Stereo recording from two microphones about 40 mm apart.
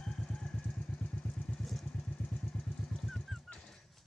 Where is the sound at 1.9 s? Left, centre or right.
Left; by 3.2 s centre.